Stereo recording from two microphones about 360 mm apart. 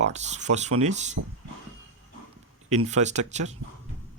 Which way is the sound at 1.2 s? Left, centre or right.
Right.